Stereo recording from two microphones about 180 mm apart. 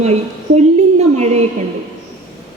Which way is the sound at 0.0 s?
40° right (ahead or behind).